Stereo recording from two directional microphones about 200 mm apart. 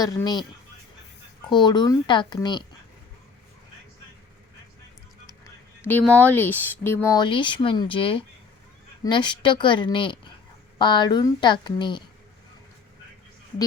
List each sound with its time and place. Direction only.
0.0 s speech: 15° left (ahead or behind)
1.5 s speech: 20° left (ahead or behind)
5.8 s speech: 10° left (ahead or behind)